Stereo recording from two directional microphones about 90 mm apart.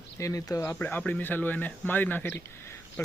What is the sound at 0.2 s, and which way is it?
Speech, 40° left (ahead or behind).